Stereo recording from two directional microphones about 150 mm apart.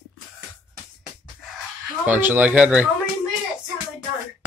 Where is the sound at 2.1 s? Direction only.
10° right (ahead or behind).